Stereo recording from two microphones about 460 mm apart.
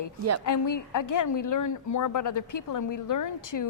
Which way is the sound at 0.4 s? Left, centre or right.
Left.